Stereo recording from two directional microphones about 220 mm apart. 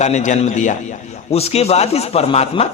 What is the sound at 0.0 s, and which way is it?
A man's voice, 35° left (ahead or behind).